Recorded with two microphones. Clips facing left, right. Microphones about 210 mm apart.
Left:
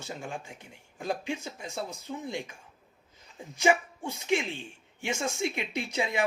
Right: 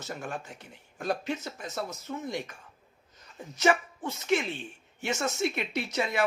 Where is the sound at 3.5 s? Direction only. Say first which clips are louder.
Even; 10° left (ahead or behind).